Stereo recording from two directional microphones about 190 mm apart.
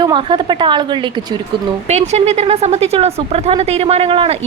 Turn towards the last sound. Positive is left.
turn(degrees=-30)  # may be behind; listen again after turning